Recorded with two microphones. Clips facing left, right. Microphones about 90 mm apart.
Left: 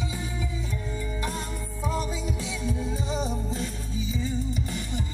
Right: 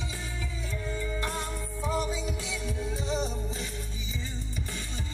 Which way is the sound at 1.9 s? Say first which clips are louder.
Even; 20° right (ahead or behind).